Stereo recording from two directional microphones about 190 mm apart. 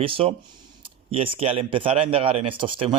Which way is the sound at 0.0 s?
30° right (ahead or behind).